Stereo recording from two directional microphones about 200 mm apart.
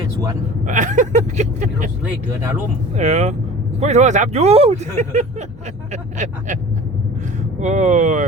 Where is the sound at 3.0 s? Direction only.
35° right (ahead or behind).